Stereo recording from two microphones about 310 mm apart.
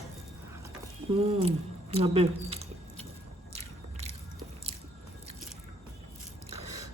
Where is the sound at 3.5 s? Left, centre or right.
Right.